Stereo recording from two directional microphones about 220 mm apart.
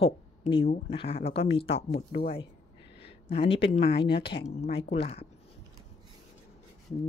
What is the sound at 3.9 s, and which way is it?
Speech, 45° left (ahead or behind).